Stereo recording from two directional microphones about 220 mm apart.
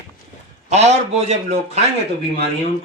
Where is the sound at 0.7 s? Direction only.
30° right (ahead or behind).